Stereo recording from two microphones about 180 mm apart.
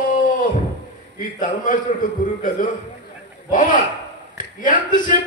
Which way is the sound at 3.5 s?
45° left (ahead or behind).